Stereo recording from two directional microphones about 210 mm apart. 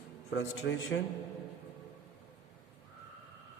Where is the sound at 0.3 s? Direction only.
60° left (ahead or behind).